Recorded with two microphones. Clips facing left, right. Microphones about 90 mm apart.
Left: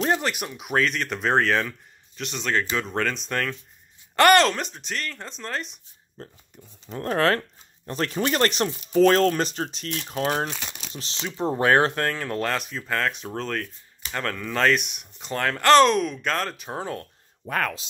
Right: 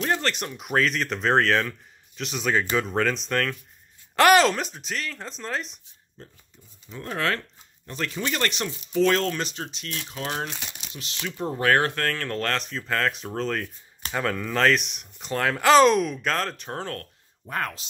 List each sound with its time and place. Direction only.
0.0 s speech: 15° left (ahead or behind); by 5.8 s centre (ahead or behind)
6.2 s speech: 40° left (ahead or behind)
10.9 s speech: 30° left (ahead or behind); by 17.0 s 10° left (ahead or behind)
17.4 s speech: 90° left